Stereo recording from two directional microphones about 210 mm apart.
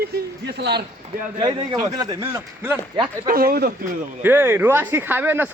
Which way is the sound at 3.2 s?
45° right (ahead or behind).